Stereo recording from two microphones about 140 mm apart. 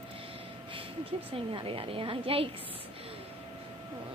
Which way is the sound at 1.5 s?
40° right (ahead or behind).